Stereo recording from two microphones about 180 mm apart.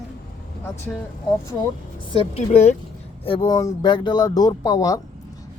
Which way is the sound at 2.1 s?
35° left (ahead or behind).